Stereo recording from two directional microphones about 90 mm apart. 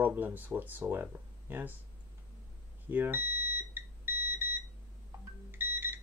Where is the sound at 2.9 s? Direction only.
20° right (ahead or behind).